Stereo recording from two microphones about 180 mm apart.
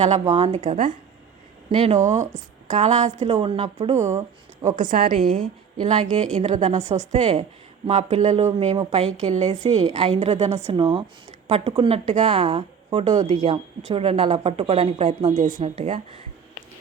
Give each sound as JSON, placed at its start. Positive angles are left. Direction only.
{"t": 0.0, "sound": "a woman's voice", "side_deg": -35}
{"t": 4.6, "sound": "a woman's voice", "side_deg": -45}
{"t": 15.8, "sound": "a woman's voice", "side_deg": -30}